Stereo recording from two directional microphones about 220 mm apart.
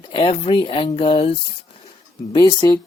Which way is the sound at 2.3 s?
20° left (ahead or behind).